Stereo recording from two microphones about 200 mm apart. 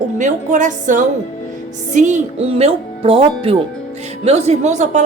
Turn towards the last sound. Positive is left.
turn(degrees=-35)  # may be behind; listen again after turning